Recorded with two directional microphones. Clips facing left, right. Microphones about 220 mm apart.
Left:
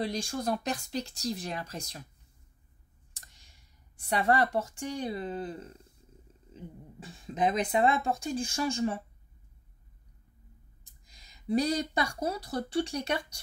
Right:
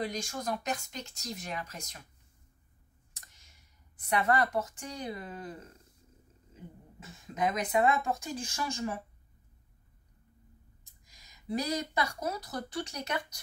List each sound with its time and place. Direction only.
0.0 s speech: 30° left (ahead or behind)
3.1 s speech: 30° left (ahead or behind)
7.0 s speech: 30° left (ahead or behind)
11.1 s speech: 30° left (ahead or behind)